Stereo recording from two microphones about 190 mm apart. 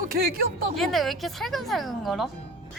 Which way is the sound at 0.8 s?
Centre (ahead or behind).